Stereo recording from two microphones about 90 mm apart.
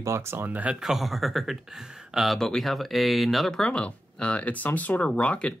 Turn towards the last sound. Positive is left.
turn(degrees=15)  # may be behind; listen again after turning